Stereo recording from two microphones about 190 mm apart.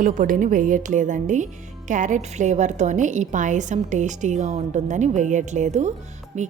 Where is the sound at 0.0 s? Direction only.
45° right (ahead or behind).